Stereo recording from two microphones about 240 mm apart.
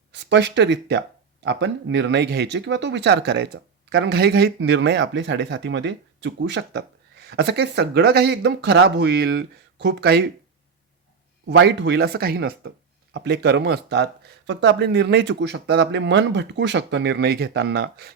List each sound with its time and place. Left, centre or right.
0.1 s speech: right
11.4 s speech: right